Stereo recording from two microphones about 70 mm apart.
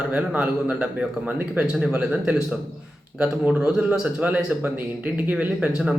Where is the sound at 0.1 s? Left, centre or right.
Centre.